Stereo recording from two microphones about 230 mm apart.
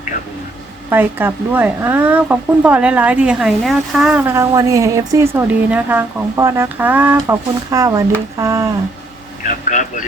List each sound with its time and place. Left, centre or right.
0.9 s speech: centre
9.6 s speech: left